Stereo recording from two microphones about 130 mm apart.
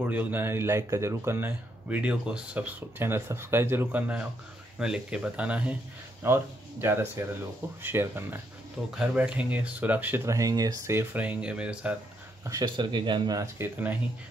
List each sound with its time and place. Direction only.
0.0 s speech: 10° right (ahead or behind)
8.9 s speech: 10° right (ahead or behind)
12.4 s speech: 30° right (ahead or behind)
13.6 s speech: 15° right (ahead or behind)